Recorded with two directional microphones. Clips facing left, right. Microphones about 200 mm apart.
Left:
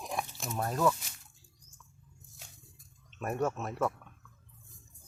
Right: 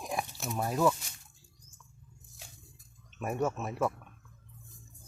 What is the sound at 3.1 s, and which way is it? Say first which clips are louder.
Speech: even; 5° right (ahead or behind).